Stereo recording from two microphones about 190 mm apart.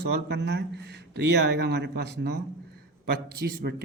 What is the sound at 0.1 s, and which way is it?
Speech, 60° right (ahead or behind).